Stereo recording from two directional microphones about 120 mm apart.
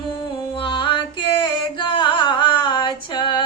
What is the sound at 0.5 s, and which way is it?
Music, 45° left (ahead or behind).